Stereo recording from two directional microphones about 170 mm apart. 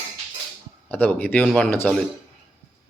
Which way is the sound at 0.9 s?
10° left (ahead or behind).